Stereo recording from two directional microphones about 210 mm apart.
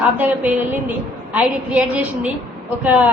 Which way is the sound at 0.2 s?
10° right (ahead or behind).